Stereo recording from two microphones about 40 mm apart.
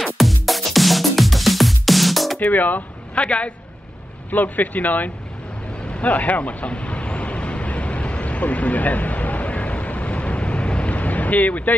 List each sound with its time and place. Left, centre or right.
0.0 s music: centre
2.5 s speech: left
3.2 s a man's voice: left
4.3 s speech: left
5.9 s vehicle: left
11.0 s a sound: left